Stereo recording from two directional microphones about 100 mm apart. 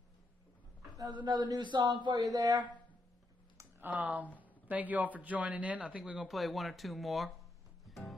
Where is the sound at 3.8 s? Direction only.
15° right (ahead or behind); by 7.3 s centre (ahead or behind).